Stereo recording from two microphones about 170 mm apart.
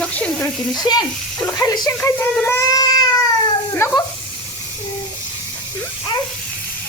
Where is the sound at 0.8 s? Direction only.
25° left (ahead or behind).